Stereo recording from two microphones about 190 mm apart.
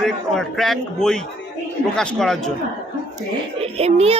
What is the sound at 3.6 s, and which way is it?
Speech, 30° right (ahead or behind).